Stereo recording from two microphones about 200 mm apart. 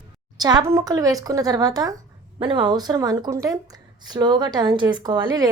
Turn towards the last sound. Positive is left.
turn(degrees=-20)  # may be behind; listen again after turning